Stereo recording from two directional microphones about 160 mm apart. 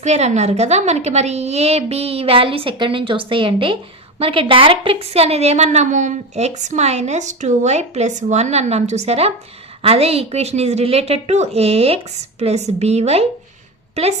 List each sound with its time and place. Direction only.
0.0 s a woman's voice: 45° right (ahead or behind)